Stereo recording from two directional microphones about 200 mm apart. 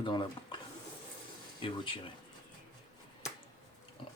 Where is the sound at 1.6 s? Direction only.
25° left (ahead or behind).